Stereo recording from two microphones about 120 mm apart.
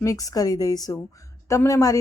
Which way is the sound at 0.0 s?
30° left (ahead or behind).